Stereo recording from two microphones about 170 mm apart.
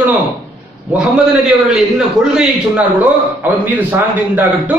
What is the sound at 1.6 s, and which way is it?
A man's voice, 5° right (ahead or behind).